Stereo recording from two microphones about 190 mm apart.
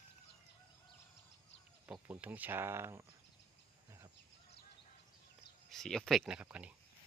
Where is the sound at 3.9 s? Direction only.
20° right (ahead or behind).